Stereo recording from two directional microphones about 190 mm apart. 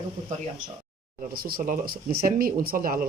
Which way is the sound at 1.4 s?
50° right (ahead or behind).